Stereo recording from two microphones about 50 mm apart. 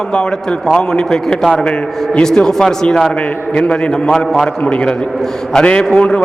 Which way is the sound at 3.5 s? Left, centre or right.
Left.